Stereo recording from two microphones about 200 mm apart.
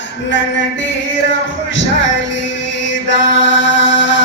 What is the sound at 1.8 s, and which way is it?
Music, 65° left (ahead or behind).